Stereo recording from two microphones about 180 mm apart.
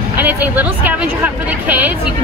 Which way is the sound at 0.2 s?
10° right (ahead or behind).